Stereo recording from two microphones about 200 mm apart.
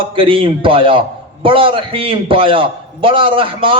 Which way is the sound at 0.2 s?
25° right (ahead or behind).